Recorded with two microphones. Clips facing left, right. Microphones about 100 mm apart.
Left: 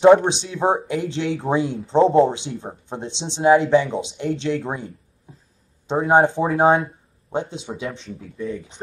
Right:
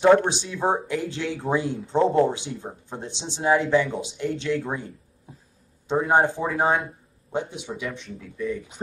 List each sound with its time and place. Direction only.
0.0 s speech: 20° left (ahead or behind)
5.9 s speech: 20° left (ahead or behind)